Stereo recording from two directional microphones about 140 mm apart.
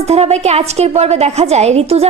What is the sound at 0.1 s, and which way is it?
A woman's voice, 50° right (ahead or behind).